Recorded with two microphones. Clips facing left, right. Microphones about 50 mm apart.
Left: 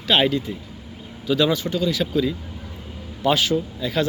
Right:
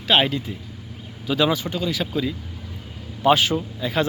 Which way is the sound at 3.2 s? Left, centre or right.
Centre.